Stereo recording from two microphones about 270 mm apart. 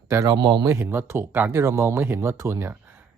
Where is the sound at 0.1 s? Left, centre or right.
Centre.